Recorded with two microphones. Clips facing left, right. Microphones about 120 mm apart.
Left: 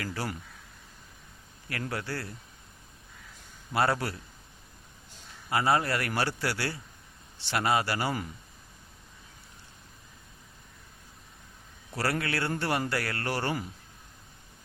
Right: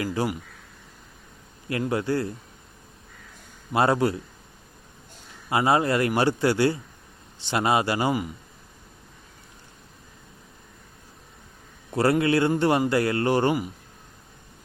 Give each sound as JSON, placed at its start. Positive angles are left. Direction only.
{"t": 0.0, "sound": "a man's voice", "side_deg": -20}
{"t": 1.7, "sound": "a man's voice", "side_deg": -20}
{"t": 3.7, "sound": "a man's voice", "side_deg": -20}
{"t": 5.5, "sound": "a man's voice", "side_deg": -20}
{"t": 11.9, "sound": "a man's voice", "side_deg": -20}